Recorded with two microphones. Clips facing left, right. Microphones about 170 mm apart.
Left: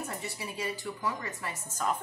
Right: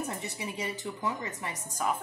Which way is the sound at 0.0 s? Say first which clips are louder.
Right 2 dB; 20° right (ahead or behind).